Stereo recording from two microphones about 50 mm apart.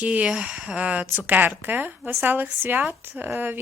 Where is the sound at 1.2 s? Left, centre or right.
Right.